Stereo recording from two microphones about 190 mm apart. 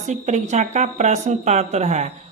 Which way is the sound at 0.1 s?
40° right (ahead or behind).